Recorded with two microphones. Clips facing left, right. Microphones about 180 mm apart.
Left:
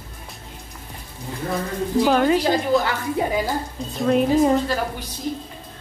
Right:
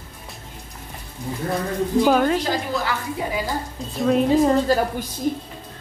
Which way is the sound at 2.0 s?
Centre (ahead or behind).